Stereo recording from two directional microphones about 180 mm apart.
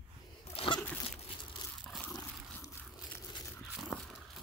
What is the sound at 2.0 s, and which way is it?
Roaring cats, 10° left (ahead or behind).